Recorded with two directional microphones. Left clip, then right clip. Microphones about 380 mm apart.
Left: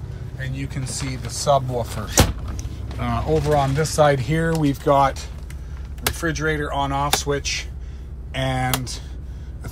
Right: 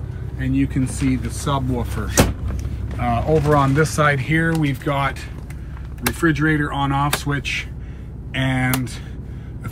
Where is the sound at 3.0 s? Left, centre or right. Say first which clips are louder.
Right 3 dB; centre.